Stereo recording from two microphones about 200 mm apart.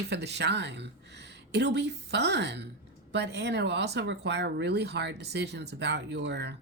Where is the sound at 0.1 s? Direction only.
55° right (ahead or behind).